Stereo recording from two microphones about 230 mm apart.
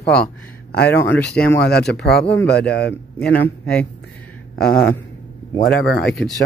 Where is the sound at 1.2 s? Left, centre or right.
Left.